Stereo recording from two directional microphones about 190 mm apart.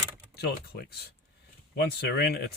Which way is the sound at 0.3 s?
55° left (ahead or behind).